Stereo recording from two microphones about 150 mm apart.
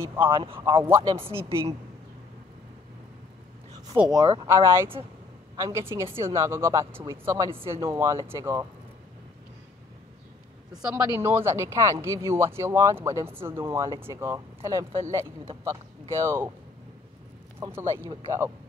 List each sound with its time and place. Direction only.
0.0 s speech: 15° right (ahead or behind)
0.3 s speech: 35° right (ahead or behind)
0.8 s speech: 15° right (ahead or behind)
4.5 s speech: 20° right (ahead or behind)
10.9 s speech: 15° right (ahead or behind)
17.6 s speech: 15° right (ahead or behind)